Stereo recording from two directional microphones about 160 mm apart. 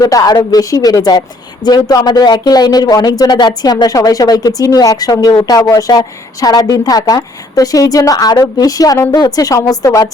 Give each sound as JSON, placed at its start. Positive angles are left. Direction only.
{"t": 0.0, "sound": "a woman's voice", "side_deg": 20}